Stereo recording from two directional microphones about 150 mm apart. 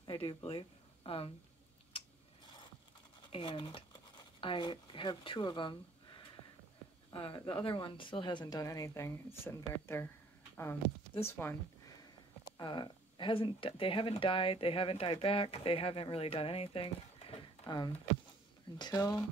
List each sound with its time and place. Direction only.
0.0 s speech: 30° left (ahead or behind)
3.3 s speech: 35° left (ahead or behind); by 10.0 s 20° left (ahead or behind)
10.5 s a sound: 15° left (ahead or behind)
11.2 s speech: 15° left (ahead or behind)
12.5 s speech: 30° left (ahead or behind)
18.8 s speech: 25° left (ahead or behind)